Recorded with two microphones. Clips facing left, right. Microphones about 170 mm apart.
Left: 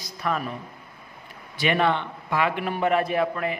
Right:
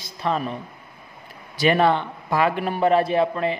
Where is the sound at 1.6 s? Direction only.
35° right (ahead or behind).